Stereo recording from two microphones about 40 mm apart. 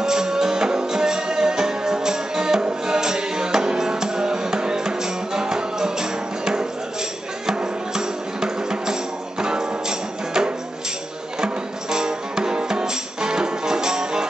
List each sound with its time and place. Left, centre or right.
0.0 s music: centre